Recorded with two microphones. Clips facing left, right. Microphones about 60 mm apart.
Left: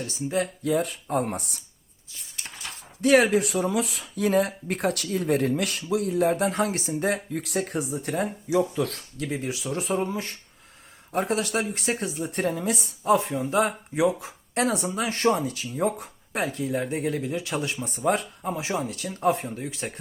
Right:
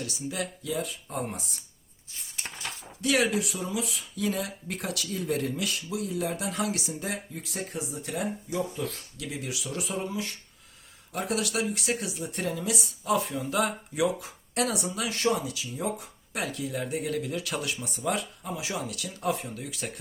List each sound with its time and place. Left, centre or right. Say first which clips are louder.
0.0 s speech: left 6 dB; left
0.6 s speech: left 7 dB; left
3.0 s speech: left 7 dB; left
3.4 s speech: left 7 dB; left
7.0 s speech: left 8 dB; left
8.4 s speech: left 7 dB; left
9.1 s speech: left 6 dB; left